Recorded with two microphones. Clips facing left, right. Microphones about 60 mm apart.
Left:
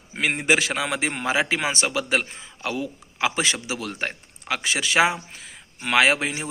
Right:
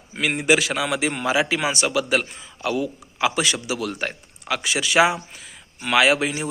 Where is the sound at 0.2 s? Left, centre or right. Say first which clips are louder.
Right 2 dB; left.